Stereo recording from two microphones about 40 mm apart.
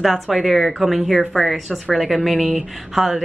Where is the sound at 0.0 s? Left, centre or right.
Centre.